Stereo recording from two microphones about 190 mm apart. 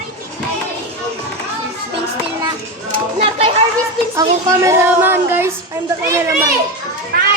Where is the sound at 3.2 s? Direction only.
30° right (ahead or behind).